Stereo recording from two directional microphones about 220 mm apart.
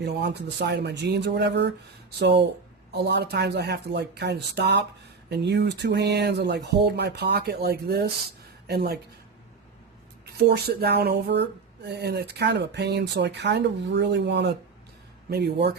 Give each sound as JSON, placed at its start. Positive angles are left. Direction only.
{"t": 0.0, "sound": "speech", "side_deg": -50}
{"t": 10.3, "sound": "speech", "side_deg": -45}